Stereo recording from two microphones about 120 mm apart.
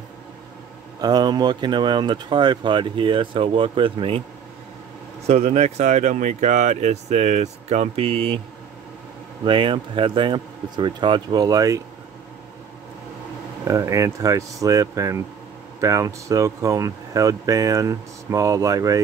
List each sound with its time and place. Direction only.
1.0 s speech: 35° right (ahead or behind)
5.2 s speech: 65° right (ahead or behind)
9.4 s speech: 45° right (ahead or behind)
13.7 s speech: 25° right (ahead or behind)